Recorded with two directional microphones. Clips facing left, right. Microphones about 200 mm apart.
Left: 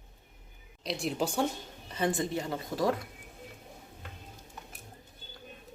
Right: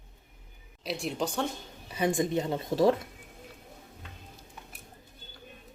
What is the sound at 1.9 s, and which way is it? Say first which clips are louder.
Speech: right 3 dB; 10° right (ahead or behind).